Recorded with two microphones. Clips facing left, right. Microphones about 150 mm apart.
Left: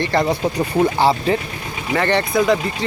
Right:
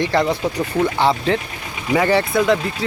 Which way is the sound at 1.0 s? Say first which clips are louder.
Left 1 dB; 5° left (ahead or behind).